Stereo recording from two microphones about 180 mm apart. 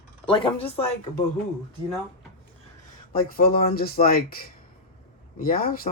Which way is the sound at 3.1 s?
55° left (ahead or behind).